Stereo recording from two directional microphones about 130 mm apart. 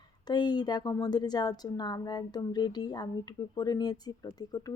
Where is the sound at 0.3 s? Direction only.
35° left (ahead or behind).